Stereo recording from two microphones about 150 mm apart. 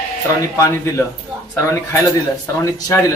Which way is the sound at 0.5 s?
20° left (ahead or behind).